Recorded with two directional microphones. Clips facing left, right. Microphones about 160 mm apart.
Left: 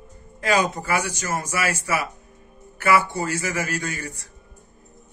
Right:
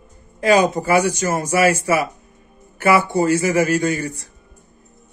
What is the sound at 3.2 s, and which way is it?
Speech, 25° right (ahead or behind).